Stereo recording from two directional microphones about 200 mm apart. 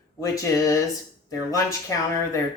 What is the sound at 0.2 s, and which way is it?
Speech, 15° left (ahead or behind).